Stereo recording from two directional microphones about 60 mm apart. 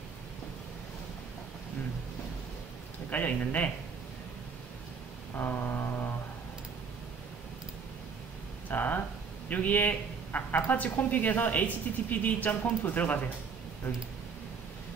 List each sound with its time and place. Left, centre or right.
3.1 s speech: left
5.3 s a sound: left
8.6 s speech: left